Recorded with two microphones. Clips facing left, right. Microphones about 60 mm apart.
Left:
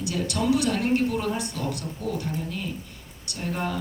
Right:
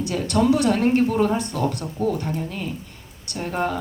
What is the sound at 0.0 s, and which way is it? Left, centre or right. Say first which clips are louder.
Speech: right 6 dB; right.